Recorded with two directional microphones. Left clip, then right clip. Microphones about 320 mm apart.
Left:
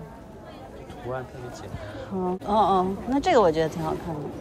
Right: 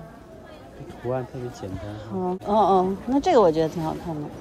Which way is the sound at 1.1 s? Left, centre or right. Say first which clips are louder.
Right 5 dB; right.